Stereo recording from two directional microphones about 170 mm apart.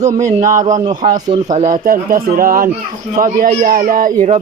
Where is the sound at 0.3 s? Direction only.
50° right (ahead or behind).